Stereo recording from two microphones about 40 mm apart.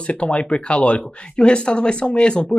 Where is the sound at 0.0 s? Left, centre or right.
Left.